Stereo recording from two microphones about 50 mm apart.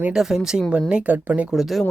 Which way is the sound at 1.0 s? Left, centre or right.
Right.